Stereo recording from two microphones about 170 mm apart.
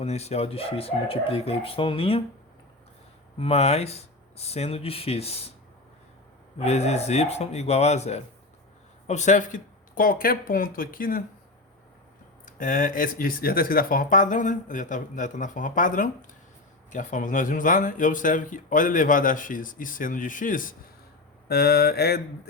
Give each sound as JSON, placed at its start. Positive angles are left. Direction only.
{"t": 0.0, "sound": "speech", "side_deg": 40}
{"t": 3.3, "sound": "speech", "side_deg": 35}
{"t": 6.6, "sound": "speech", "side_deg": 40}
{"t": 12.5, "sound": "speech", "side_deg": 55}
{"t": 21.4, "sound": "a sound", "side_deg": 70}